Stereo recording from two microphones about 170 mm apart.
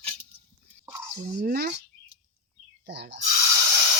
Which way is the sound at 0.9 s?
15° right (ahead or behind).